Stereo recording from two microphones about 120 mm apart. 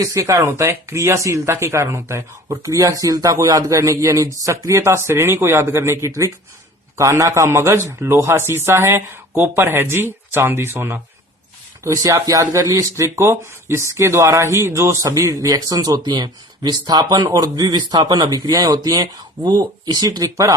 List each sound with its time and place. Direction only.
0.0 s speech: 25° right (ahead or behind)